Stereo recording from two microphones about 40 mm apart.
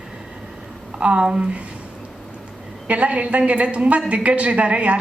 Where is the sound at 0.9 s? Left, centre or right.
Right.